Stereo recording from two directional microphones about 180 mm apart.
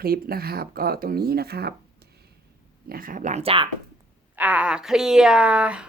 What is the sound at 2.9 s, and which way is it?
Speech, 50° right (ahead or behind).